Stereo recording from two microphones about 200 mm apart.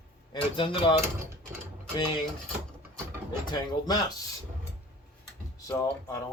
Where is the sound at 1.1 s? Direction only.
15° right (ahead or behind).